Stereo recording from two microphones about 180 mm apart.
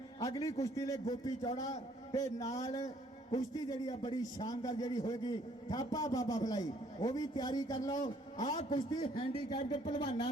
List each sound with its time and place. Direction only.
0.2 s a man's voice: 20° left (ahead or behind)